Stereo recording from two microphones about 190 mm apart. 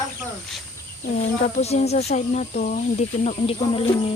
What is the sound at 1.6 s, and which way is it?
Speech, 35° left (ahead or behind).